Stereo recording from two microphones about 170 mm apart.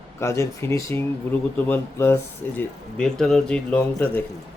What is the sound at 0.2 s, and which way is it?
A man's voice, 15° left (ahead or behind).